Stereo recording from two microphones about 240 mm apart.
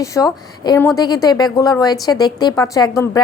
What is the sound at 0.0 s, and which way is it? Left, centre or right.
A woman's voice, centre.